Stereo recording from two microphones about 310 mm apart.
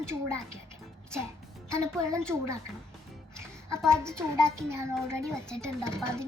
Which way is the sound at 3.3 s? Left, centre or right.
Centre.